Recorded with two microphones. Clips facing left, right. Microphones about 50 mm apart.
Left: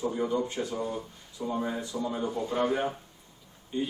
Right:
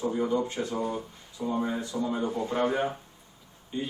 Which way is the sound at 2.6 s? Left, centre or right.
Centre.